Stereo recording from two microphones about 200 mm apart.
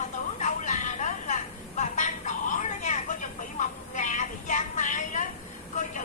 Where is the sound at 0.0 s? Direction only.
35° left (ahead or behind).